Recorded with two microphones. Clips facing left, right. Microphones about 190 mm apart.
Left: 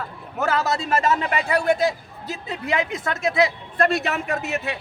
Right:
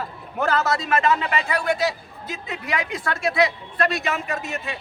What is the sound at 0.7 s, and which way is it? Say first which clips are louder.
Speech: even; 30° left (ahead or behind).